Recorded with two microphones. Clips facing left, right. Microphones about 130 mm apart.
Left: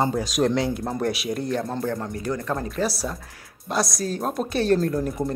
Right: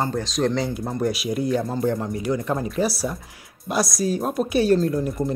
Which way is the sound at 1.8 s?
20° right (ahead or behind).